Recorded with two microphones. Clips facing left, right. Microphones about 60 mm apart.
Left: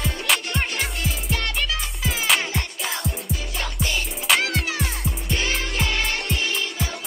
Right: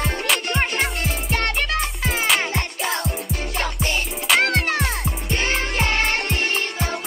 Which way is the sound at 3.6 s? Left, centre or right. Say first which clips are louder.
Right 2 dB; right.